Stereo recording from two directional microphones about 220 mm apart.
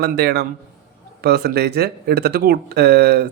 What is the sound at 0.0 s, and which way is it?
Speech, 50° right (ahead or behind).